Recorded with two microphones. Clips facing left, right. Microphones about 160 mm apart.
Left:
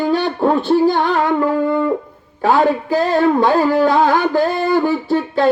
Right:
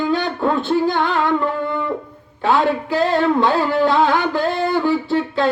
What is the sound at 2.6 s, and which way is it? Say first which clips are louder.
Speech: left 2 dB; 45° left (ahead or behind).